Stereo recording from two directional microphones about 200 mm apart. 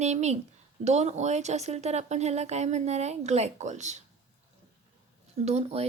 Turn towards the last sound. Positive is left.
turn(degrees=-30)  # may be behind; listen again after turning